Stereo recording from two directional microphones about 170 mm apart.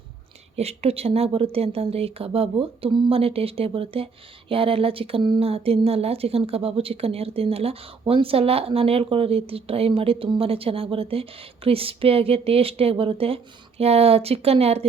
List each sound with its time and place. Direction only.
0.5 s a woman's voice: 35° right (ahead or behind)